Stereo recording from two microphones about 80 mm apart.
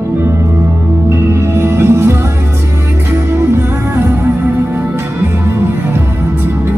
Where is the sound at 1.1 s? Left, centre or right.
Right.